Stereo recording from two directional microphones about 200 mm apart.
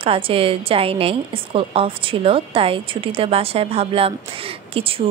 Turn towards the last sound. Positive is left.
turn(degrees=-30)  # may be behind; listen again after turning